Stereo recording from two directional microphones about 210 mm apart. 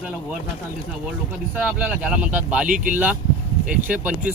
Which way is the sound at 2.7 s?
40° right (ahead or behind).